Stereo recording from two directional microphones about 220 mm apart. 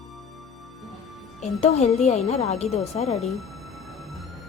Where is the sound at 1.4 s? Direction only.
30° left (ahead or behind).